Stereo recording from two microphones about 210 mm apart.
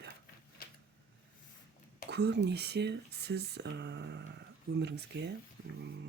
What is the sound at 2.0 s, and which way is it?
Speech, 55° right (ahead or behind).